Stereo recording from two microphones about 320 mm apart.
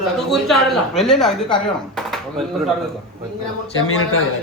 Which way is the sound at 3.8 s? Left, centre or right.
Left.